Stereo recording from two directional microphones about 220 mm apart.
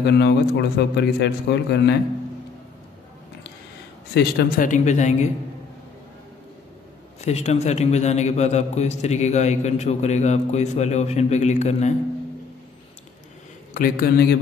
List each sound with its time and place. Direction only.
0.0 s a man's voice: 50° left (ahead or behind)
4.1 s a man's voice: 50° left (ahead or behind)
7.2 s a man's voice: 30° left (ahead or behind)
13.7 s a man's voice: 40° left (ahead or behind)